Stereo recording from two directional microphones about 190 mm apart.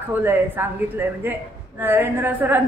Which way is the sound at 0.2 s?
10° right (ahead or behind).